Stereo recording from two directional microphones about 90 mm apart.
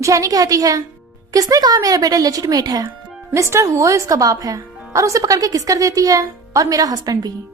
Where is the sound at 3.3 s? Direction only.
30° right (ahead or behind).